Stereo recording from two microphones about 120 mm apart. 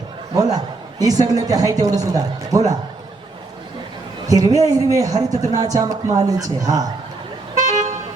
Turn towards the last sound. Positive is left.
turn(degrees=-90)